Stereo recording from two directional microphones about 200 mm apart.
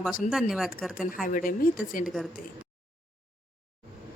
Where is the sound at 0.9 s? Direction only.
45° left (ahead or behind).